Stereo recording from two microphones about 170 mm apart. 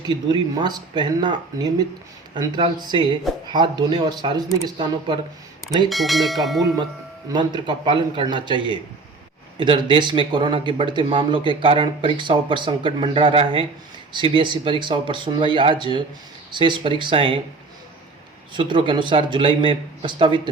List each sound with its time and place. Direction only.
0.0 s speech: 25° right (ahead or behind)
5.9 s speech: centre (ahead or behind)
7.3 s speech: 25° right (ahead or behind)
18.5 s speech: 30° right (ahead or behind)